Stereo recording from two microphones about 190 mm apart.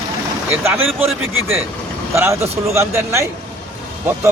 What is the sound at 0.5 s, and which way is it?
Speech, 10° right (ahead or behind).